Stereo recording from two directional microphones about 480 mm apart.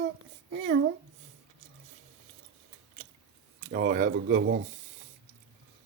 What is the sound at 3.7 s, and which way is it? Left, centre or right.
Speech, centre.